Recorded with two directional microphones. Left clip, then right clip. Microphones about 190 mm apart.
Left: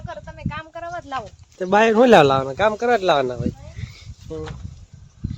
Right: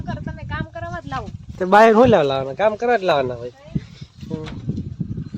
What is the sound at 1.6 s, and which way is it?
Speech, 15° right (ahead or behind).